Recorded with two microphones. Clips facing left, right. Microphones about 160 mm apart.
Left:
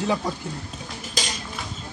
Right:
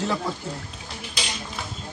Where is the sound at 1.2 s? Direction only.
40° left (ahead or behind).